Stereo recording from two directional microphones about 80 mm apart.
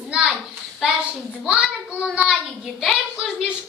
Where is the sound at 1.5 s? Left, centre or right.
Centre.